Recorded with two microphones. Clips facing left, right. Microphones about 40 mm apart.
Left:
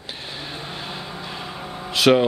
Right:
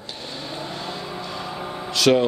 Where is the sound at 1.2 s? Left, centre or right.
Left.